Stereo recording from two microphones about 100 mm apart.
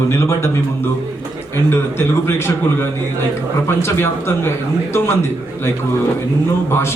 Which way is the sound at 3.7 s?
25° left (ahead or behind).